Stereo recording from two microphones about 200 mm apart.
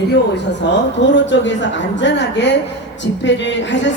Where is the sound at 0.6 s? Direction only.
65° left (ahead or behind).